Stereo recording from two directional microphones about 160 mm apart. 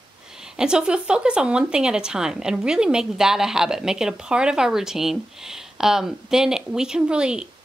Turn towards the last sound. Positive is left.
turn(degrees=-5)  # may be behind; listen again after turning